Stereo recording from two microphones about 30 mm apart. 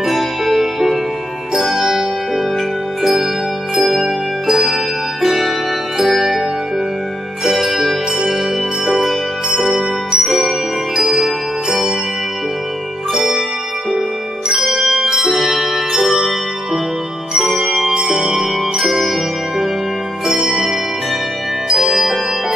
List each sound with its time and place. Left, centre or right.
0.0 s music: centre
3.0 s music: centre
7.6 s jingle bell: centre
9.6 s music: centre
13.1 s music: centre
14.5 s music: centre
15.3 s music: centre
18.0 s jingle bell: centre
20.2 s music: centre
21.7 s music: centre